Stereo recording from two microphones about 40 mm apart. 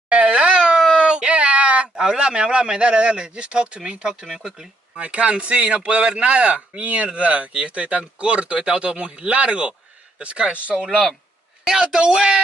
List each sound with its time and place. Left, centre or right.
0.1 s a sound: right
2.0 s speech: right
4.3 s speech: centre
5.0 s speech: right